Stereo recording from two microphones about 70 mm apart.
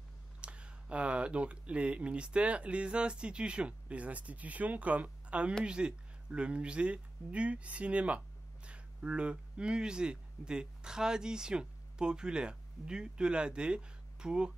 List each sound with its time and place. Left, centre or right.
0.4 s speech: centre